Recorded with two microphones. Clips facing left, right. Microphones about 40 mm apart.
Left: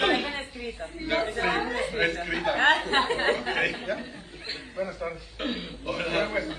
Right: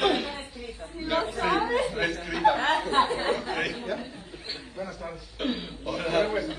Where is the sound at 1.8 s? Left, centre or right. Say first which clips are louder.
Even; left.